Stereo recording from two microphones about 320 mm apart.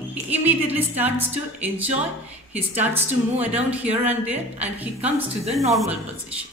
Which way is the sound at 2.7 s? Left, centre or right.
Centre.